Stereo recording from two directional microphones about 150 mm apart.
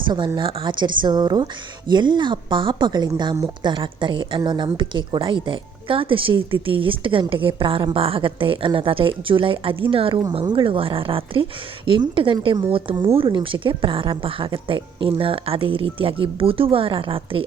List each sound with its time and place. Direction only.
0.3 s a woman's voice: 30° right (ahead or behind)